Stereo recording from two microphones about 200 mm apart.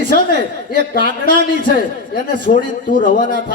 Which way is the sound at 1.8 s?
45° left (ahead or behind).